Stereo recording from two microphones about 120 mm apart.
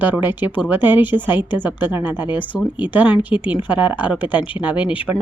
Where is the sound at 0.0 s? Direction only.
15° right (ahead or behind).